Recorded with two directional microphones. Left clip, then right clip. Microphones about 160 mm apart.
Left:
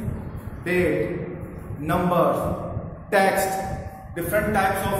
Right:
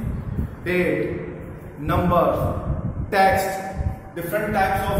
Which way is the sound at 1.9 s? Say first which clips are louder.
Right 1 dB; centre (ahead or behind).